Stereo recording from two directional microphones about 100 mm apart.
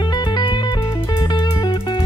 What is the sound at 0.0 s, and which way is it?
Music, 45° left (ahead or behind).